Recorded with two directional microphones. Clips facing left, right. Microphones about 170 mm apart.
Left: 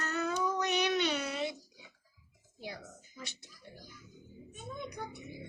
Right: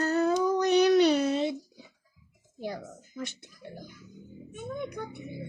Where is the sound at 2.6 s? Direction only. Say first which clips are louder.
Right 8 dB; 50° right (ahead or behind).